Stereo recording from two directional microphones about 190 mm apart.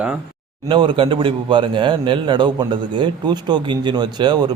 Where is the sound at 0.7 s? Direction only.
25° right (ahead or behind).